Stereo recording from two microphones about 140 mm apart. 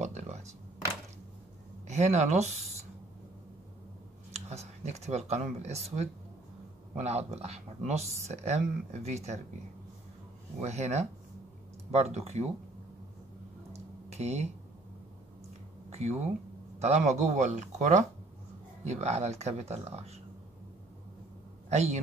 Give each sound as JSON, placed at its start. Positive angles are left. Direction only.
{"t": 0.0, "sound": "a sound", "side_deg": -55}
{"t": 1.9, "sound": "speech", "side_deg": -55}
{"t": 4.3, "sound": "speech", "side_deg": -50}
{"t": 10.6, "sound": "speech", "side_deg": -55}
{"t": 13.7, "sound": "a sound", "side_deg": -50}
{"t": 15.9, "sound": "speech", "side_deg": -50}
{"t": 21.6, "sound": "a man's voice", "side_deg": -50}